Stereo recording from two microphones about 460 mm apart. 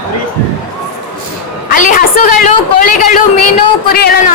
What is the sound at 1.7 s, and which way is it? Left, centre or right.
A woman's voice, centre.